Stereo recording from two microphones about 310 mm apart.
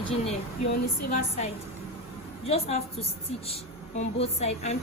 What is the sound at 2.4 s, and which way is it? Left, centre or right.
A woman's voice, centre.